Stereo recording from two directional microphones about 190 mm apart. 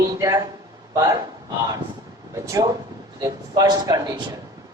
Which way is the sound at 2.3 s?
15° right (ahead or behind).